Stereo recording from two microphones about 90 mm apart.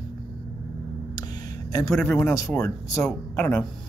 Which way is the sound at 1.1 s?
50° left (ahead or behind).